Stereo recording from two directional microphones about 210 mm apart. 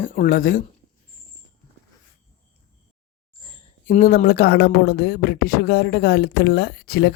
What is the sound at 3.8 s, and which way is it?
Speech, 45° left (ahead or behind).